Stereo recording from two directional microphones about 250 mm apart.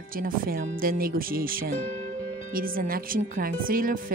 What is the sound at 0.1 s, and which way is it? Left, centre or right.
Speech, right.